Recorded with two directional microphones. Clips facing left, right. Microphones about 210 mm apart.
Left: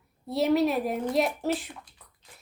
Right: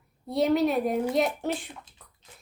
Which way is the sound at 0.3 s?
Centre (ahead or behind).